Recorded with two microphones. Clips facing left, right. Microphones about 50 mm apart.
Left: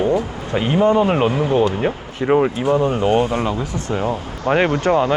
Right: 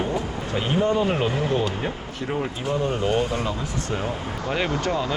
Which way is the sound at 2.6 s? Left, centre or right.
Left.